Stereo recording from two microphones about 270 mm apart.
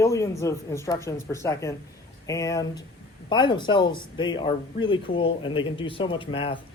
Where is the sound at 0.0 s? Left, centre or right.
Centre.